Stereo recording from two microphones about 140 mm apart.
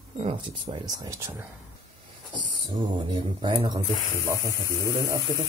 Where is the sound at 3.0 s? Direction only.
35° right (ahead or behind).